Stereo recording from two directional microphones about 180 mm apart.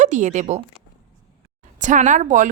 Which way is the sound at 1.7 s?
45° right (ahead or behind).